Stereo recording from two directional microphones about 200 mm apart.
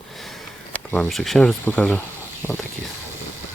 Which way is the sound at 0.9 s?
5° left (ahead or behind).